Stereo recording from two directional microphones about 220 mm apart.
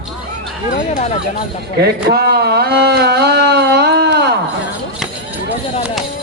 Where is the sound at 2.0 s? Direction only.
45° right (ahead or behind).